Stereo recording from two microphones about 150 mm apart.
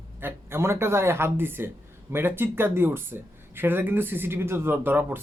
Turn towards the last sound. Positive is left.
turn(degrees=-15)  # may be behind; listen again after turning